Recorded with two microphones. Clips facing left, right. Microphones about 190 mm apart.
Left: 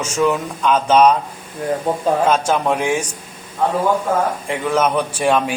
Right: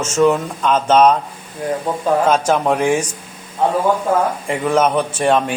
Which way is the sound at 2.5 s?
5° right (ahead or behind).